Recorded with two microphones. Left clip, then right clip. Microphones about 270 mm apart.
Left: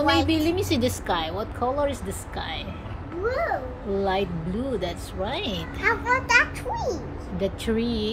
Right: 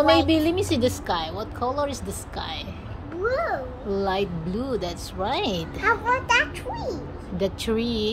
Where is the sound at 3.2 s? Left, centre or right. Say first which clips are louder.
Right 1 dB; centre.